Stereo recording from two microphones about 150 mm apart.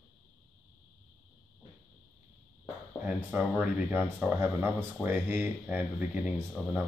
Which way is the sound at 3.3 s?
10° right (ahead or behind).